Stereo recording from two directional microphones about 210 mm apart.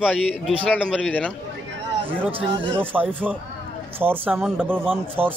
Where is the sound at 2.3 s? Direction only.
25° right (ahead or behind).